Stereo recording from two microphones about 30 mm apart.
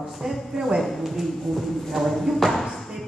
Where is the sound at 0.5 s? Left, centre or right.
Centre.